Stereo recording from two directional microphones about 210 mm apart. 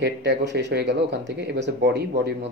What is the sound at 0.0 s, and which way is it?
A man's voice, 55° right (ahead or behind).